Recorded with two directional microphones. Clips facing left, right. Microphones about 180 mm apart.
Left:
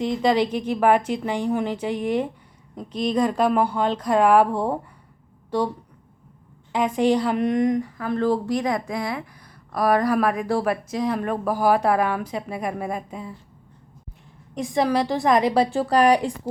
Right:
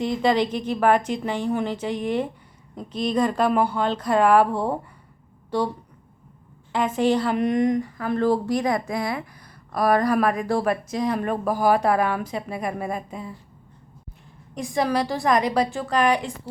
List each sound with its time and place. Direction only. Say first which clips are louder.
0.0 s a woman's voice: left 1 dB; centre (ahead or behind)
3.5 s speech: even; 5° right (ahead or behind)
3.8 s a woman's voice: left 1 dB; 10° left (ahead or behind)
6.7 s a woman's voice: left 1 dB; 5° right (ahead or behind)
14.5 s a woman's voice: left 2 dB; 25° left (ahead or behind)